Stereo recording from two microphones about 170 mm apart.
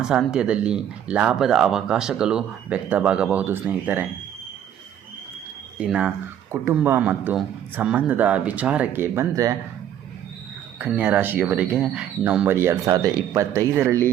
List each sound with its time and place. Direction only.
0.0 s speech: 5° right (ahead or behind)
5.8 s speech: 5° right (ahead or behind)
10.8 s speech: 10° right (ahead or behind)